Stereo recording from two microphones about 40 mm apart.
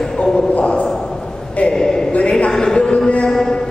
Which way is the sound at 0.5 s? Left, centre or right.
Left.